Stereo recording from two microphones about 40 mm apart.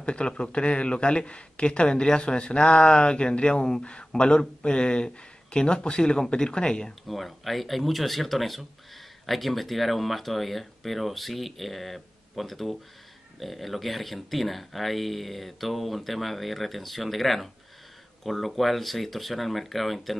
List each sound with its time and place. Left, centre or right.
0.0 s a man's voice: left
7.1 s speech: centre